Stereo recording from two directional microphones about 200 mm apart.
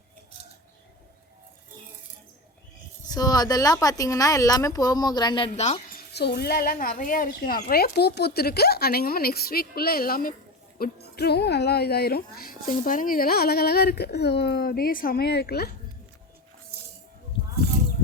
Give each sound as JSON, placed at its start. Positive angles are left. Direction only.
{"t": 3.1, "sound": "speech", "side_deg": 20}
{"t": 6.1, "sound": "speech", "side_deg": 55}